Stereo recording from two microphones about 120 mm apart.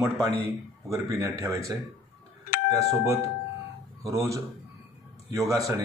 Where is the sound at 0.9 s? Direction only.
25° right (ahead or behind).